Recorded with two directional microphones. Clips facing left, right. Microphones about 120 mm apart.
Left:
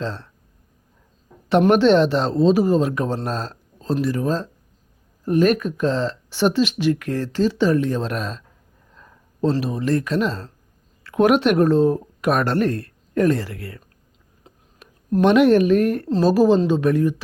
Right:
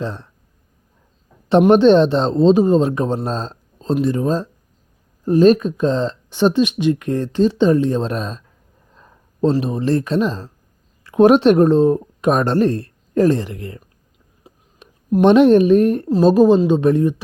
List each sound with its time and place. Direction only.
0.0 s speech: 15° right (ahead or behind)
1.5 s speech: 25° right (ahead or behind)
3.2 s a sound: 25° right (ahead or behind)
4.0 s speech: 25° right (ahead or behind)
10.2 s speech: 15° right (ahead or behind)